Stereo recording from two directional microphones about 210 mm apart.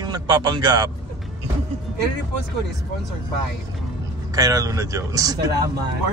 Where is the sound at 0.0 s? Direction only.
20° right (ahead or behind).